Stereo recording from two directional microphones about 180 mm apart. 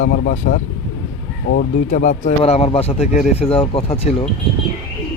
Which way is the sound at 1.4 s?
60° left (ahead or behind).